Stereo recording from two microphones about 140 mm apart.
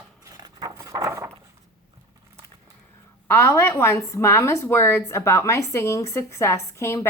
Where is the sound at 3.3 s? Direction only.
20° left (ahead or behind).